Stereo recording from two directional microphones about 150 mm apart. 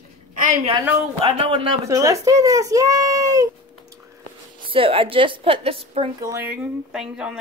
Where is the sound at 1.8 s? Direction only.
20° right (ahead or behind).